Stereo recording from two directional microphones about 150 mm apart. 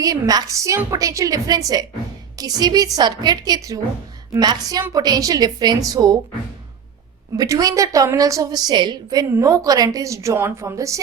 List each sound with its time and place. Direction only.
0.0 s a woman's voice: 25° right (ahead or behind)
7.3 s a woman's voice: 20° right (ahead or behind)